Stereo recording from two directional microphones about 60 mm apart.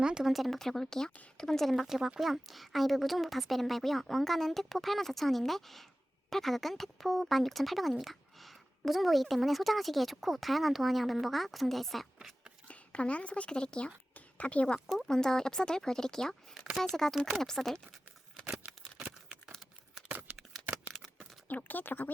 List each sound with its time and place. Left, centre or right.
0.0 s speech: centre
0.3 s speech: centre
12.6 s speech: left
14.8 s speech: centre
18.6 s a sound: right
21.4 s speech: left